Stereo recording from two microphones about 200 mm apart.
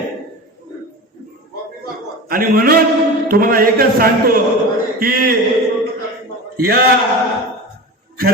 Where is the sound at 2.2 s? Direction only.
45° right (ahead or behind).